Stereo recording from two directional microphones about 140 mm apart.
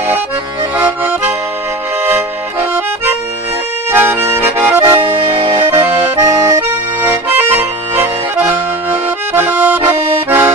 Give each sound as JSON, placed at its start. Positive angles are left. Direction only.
{"t": 0.8, "sound": "accordion", "side_deg": -10}